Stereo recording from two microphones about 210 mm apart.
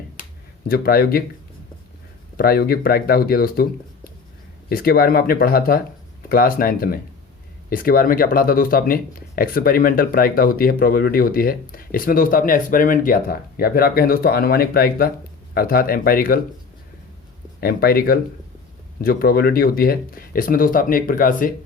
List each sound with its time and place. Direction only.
0.7 s speech: 45° left (ahead or behind)
2.3 s speech: 45° left (ahead or behind)
17.6 s speech: 45° left (ahead or behind)